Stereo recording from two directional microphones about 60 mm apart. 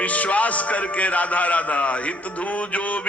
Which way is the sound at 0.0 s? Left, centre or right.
Left.